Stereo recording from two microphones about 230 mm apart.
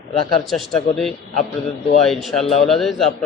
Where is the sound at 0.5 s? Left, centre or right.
Centre.